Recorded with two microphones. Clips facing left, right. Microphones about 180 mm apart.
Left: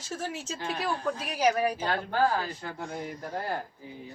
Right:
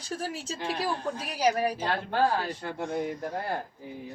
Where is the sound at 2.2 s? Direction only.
35° right (ahead or behind).